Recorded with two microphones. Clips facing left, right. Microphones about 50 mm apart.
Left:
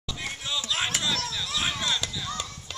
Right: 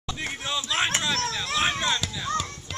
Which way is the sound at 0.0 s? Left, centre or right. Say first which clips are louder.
Right 3 dB; right.